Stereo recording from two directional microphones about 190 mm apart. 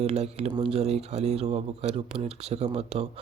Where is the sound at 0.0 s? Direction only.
35° right (ahead or behind).